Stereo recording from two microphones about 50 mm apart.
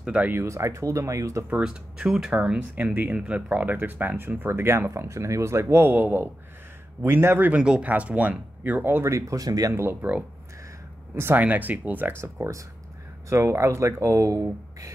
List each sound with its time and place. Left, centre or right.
0.0 s speech: right
0.4 s speech: right
1.6 s speech: centre
2.7 s speech: right
3.2 s speech: right
4.5 s speech: right
7.0 s a man's voice: right
7.5 s speech: centre
7.8 s speech: right
8.8 s a man's voice: right
9.1 s speech: right
10.0 s speech: right
11.3 s speech: right
12.4 s speech: right